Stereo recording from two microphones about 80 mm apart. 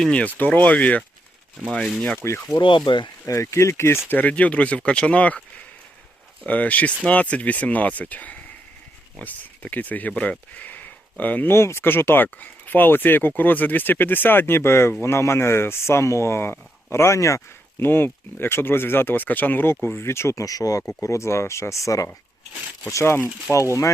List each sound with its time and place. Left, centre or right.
0.0 s speech: centre
1.6 s speech: centre
2.1 s speech: left
2.6 s speech: left
3.2 s speech: left
4.1 s speech: centre
6.4 s speech: centre; by 17.8 s left
17.8 s speech: left
20.4 s speech: left